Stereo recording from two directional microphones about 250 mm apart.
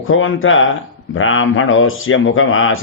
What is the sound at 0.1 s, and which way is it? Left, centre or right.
Speech, left.